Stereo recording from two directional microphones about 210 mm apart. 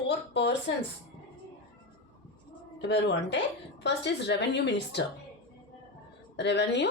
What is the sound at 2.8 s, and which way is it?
A woman's voice, 55° left (ahead or behind).